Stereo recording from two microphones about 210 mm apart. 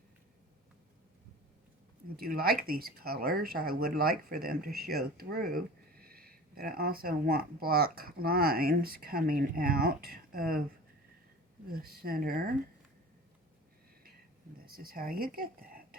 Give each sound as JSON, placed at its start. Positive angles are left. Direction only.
{"t": 2.1, "sound": "speech", "side_deg": -45}
{"t": 11.7, "sound": "speech", "side_deg": -45}
{"t": 14.6, "sound": "speech", "side_deg": -45}